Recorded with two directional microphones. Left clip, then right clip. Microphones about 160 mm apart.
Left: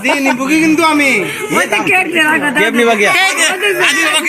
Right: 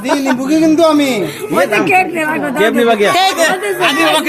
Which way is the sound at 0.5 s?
60° right (ahead or behind).